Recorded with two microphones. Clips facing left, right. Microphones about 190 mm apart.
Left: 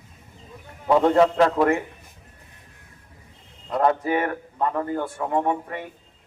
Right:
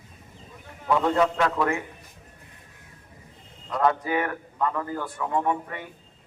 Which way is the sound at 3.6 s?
30° left (ahead or behind).